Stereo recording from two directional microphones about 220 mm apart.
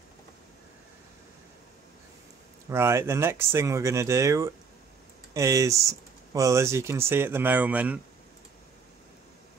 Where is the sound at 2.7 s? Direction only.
10° right (ahead or behind).